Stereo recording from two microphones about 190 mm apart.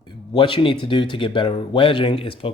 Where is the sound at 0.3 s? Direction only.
25° left (ahead or behind).